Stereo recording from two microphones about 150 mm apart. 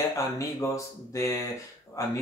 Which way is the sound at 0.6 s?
20° left (ahead or behind).